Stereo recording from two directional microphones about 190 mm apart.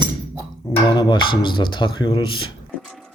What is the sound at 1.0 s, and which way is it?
Speech, 25° left (ahead or behind).